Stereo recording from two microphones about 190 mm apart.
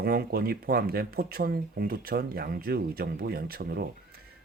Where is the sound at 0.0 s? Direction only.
55° right (ahead or behind).